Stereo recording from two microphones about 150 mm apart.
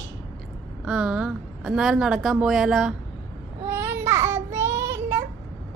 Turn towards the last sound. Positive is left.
turn(degrees=-15)  # may be behind; listen again after turning